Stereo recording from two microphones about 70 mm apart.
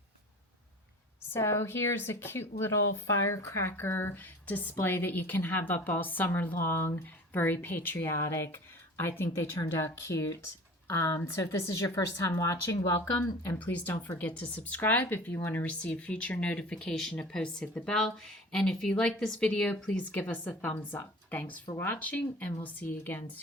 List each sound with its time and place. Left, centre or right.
1.3 s a woman's voice: left
8.2 s speech: left
9.0 s speech: left
13.2 s speech: left
13.7 s a woman's voice: left
15.8 s a woman's voice: centre